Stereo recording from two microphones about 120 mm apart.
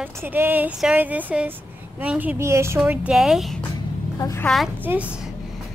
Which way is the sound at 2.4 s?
25° right (ahead or behind).